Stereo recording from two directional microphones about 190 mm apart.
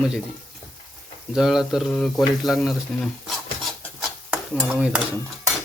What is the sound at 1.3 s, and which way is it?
Speech, centre (ahead or behind).